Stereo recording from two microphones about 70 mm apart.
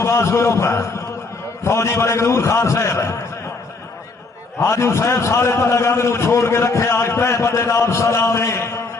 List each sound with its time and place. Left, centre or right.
0.0 s a man's voice: left
4.6 s a man's voice: left